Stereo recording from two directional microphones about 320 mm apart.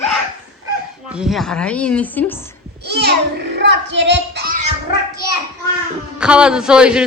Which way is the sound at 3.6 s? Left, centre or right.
Right.